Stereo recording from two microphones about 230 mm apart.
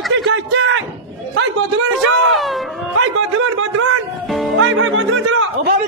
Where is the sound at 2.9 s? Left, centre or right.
Right.